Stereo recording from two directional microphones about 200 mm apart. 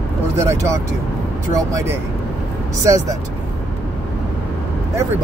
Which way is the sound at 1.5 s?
15° right (ahead or behind).